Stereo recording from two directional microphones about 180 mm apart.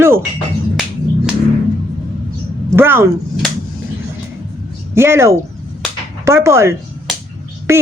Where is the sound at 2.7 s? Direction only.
15° right (ahead or behind).